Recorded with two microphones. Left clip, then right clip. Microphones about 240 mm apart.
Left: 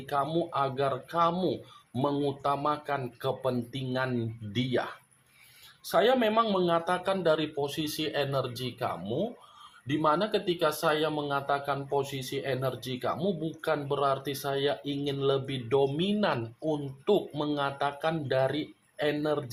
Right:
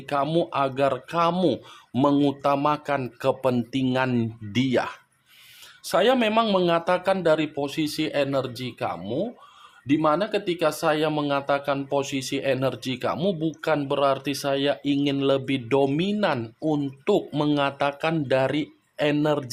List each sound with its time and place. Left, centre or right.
0.1 s speech: right